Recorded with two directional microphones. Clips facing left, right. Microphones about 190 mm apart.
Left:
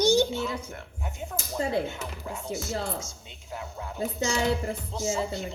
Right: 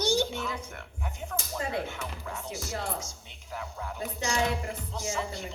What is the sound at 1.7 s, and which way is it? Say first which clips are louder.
A woman's voice: left 4 dB; 30° left (ahead or behind).